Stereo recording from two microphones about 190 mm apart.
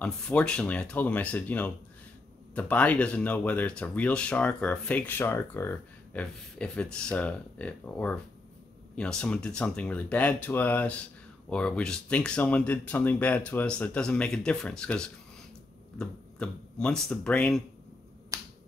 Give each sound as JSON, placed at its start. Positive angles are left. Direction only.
{"t": 0.0, "sound": "speech", "side_deg": 5}
{"t": 18.3, "sound": "finger snapping", "side_deg": -15}